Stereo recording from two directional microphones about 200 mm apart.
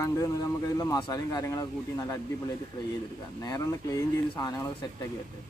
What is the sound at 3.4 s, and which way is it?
Speech, 15° left (ahead or behind).